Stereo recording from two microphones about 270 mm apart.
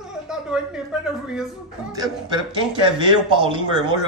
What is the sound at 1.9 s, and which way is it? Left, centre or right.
A man's voice, centre.